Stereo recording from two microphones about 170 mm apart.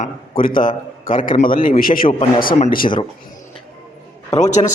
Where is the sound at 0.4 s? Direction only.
55° left (ahead or behind).